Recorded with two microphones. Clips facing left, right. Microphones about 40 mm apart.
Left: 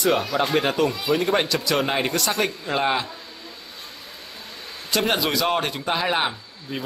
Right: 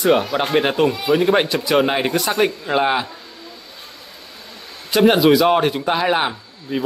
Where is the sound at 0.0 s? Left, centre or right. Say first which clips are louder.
Right 4 dB; right.